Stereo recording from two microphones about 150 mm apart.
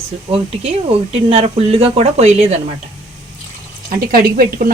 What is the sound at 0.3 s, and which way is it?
Speech, 40° right (ahead or behind).